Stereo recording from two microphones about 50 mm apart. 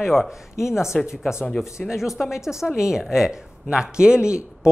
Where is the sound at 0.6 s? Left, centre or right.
Left.